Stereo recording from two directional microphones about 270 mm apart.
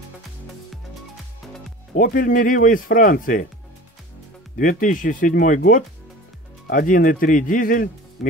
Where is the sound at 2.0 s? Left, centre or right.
Left.